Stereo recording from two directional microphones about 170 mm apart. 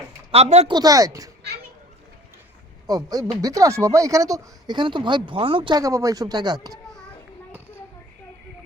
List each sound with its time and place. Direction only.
0.3 s speech: 40° right (ahead or behind)
0.7 s speech: 20° right (ahead or behind)
2.8 s speech: 20° right (ahead or behind)